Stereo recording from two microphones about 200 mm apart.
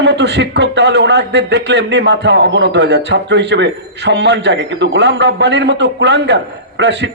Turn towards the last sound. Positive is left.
turn(degrees=-60)  # may be behind; listen again after turning